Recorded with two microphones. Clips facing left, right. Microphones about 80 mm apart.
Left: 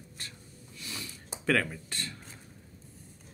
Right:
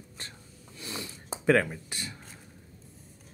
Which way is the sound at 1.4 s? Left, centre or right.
Centre.